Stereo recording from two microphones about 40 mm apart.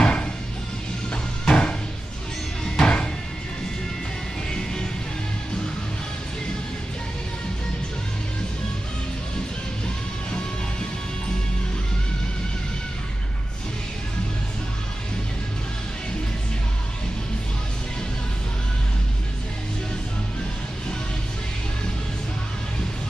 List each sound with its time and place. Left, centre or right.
0.0 s music: left
2.8 s music: left
4.5 s music: centre